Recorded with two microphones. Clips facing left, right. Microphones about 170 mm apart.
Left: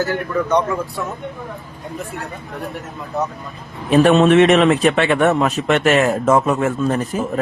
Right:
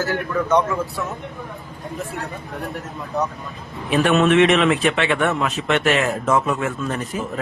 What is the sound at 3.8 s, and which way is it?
A man's voice, 35° left (ahead or behind).